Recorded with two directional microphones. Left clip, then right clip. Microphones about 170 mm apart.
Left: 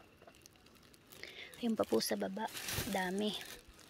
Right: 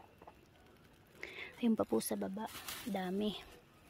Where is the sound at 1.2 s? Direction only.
30° right (ahead or behind).